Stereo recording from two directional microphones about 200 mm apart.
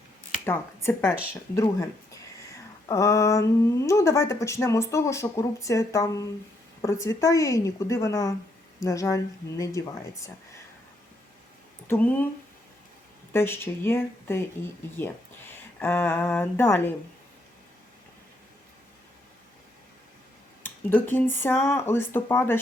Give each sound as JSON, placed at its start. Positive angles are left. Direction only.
{"t": 0.4, "sound": "speech", "side_deg": 10}
{"t": 2.9, "sound": "speech", "side_deg": 15}
{"t": 11.9, "sound": "speech", "side_deg": 10}
{"t": 13.3, "sound": "speech", "side_deg": 10}
{"t": 15.8, "sound": "speech", "side_deg": 10}
{"t": 20.6, "sound": "speech", "side_deg": 10}